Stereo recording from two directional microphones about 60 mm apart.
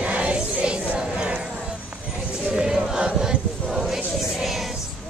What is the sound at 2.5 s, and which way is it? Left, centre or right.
Chant, centre.